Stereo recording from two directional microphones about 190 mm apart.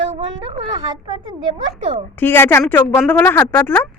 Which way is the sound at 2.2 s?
10° left (ahead or behind).